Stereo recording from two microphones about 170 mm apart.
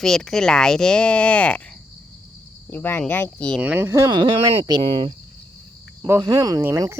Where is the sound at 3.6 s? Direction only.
10° right (ahead or behind).